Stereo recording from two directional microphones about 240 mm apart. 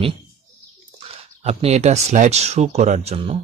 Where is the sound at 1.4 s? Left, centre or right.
Right.